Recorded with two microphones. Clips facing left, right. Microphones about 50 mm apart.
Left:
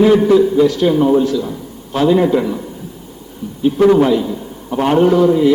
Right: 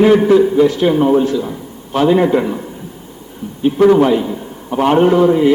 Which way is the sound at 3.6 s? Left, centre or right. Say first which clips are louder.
Right 1 dB; right.